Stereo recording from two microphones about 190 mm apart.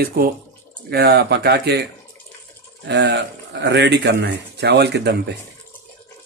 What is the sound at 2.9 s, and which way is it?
Speech, 65° right (ahead or behind).